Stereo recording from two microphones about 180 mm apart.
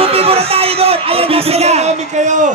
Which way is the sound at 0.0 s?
35° right (ahead or behind).